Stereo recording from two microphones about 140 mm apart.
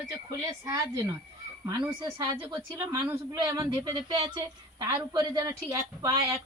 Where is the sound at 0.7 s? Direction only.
20° right (ahead or behind).